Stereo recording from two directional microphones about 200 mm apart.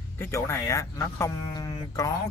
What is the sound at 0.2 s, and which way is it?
Speech, 15° left (ahead or behind).